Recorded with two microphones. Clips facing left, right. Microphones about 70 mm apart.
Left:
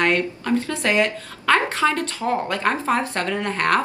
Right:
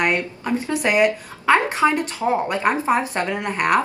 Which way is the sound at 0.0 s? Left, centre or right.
Centre.